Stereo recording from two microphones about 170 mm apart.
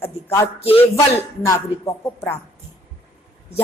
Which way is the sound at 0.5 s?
35° left (ahead or behind).